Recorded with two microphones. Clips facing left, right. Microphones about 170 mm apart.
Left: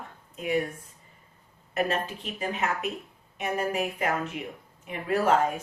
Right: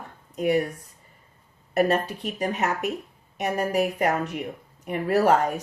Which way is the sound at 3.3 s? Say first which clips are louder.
Right 4 dB; 40° right (ahead or behind).